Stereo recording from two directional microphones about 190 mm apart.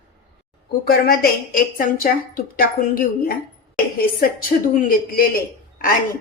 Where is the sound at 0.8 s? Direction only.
55° left (ahead or behind).